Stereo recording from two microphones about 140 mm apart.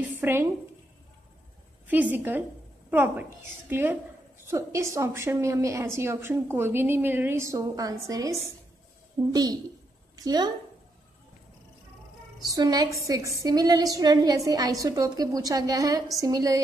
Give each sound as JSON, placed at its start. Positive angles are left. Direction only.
{"t": 0.2, "sound": "a woman's voice", "side_deg": -15}
{"t": 1.9, "sound": "a woman's voice", "side_deg": -10}
{"t": 12.5, "sound": "a woman's voice", "side_deg": -30}